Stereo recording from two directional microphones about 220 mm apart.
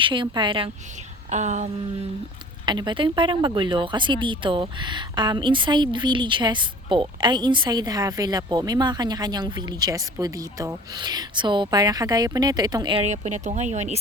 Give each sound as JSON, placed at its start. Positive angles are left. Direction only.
{"t": 0.0, "sound": "speech", "side_deg": -20}
{"t": 1.3, "sound": "a sound", "side_deg": -30}
{"t": 2.6, "sound": "speech", "side_deg": -20}